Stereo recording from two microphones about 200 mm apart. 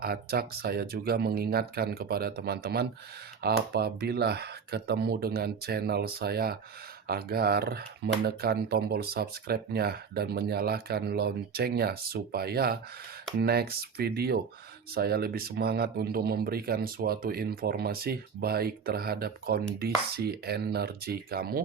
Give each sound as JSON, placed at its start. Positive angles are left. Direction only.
{"t": 0.0, "sound": "speech", "side_deg": -50}